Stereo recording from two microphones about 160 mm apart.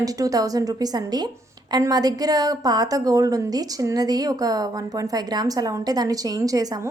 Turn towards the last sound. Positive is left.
turn(degrees=-20)  # may be behind; listen again after turning